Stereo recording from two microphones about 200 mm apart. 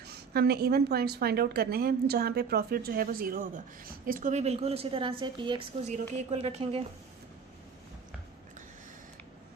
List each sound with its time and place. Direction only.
0.0 s a woman's voice: 55° right (ahead or behind); by 6.8 s 30° right (ahead or behind)